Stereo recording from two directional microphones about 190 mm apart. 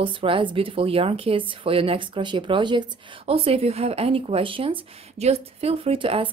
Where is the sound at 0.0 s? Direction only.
25° right (ahead or behind).